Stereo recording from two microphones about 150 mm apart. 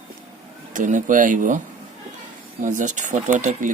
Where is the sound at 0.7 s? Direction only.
60° right (ahead or behind).